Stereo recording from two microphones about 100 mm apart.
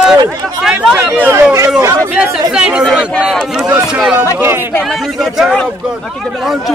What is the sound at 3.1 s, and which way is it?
Speech, 5° left (ahead or behind).